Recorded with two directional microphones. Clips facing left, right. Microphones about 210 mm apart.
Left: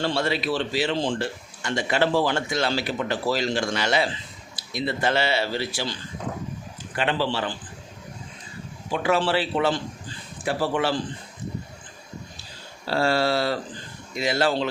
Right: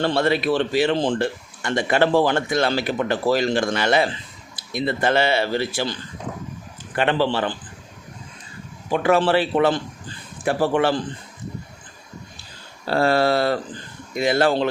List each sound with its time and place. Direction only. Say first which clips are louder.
0.0 s speech: right 5 dB; 55° right (ahead or behind)
8.9 s speech: right 5 dB; 55° right (ahead or behind)
12.9 s speech: right 4 dB; 55° right (ahead or behind)